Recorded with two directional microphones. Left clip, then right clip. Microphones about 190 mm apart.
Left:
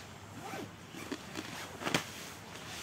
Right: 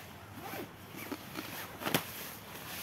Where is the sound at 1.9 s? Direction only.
35° right (ahead or behind).